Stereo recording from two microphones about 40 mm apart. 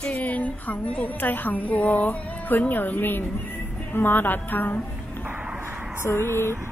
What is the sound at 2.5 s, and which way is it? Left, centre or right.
A woman's voice, left.